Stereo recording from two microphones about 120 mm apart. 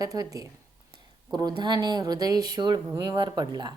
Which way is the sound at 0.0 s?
30° right (ahead or behind).